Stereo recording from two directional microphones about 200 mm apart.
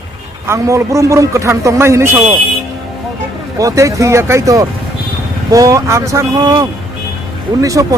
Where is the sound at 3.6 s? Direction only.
15° right (ahead or behind).